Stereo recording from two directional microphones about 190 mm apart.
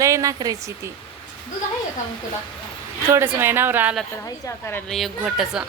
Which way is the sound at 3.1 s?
10° right (ahead or behind).